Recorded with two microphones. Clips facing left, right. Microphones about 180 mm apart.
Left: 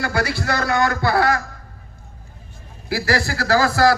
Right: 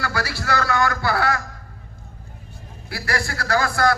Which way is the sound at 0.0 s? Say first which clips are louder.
Left 4 dB; 20° left (ahead or behind).